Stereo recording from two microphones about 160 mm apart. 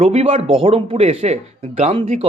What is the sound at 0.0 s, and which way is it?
Speech, 40° right (ahead or behind).